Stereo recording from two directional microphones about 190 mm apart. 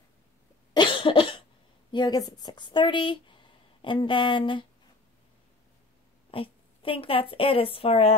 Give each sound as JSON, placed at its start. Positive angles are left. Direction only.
{"t": 0.7, "sound": "cough", "side_deg": 25}
{"t": 1.9, "sound": "a woman's voice", "side_deg": 20}
{"t": 6.3, "sound": "a woman's voice", "side_deg": 30}